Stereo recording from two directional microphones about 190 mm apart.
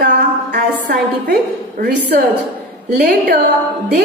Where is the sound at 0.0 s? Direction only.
60° right (ahead or behind).